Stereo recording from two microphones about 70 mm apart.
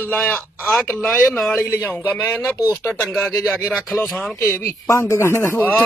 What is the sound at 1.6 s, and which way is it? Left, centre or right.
Speech, left.